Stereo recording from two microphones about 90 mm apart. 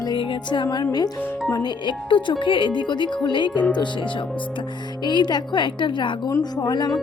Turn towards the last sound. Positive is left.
turn(degrees=55)  # may be behind; listen again after turning